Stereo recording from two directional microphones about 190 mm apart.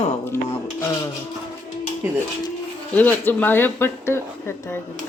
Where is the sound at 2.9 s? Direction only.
10° left (ahead or behind).